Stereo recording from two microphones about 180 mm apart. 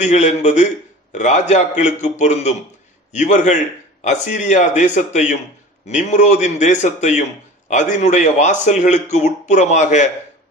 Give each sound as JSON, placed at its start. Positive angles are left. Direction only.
{"t": 0.0, "sound": "a man's voice", "side_deg": 40}